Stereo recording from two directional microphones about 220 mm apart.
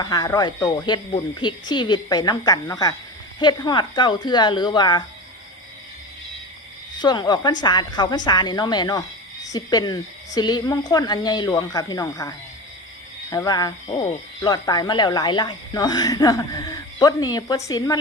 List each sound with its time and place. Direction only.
0.0 s speech: 15° left (ahead or behind)
7.0 s speech: 20° left (ahead or behind)
13.3 s speech: 15° left (ahead or behind)